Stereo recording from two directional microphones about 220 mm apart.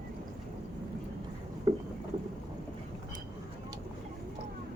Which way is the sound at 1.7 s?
20° right (ahead or behind).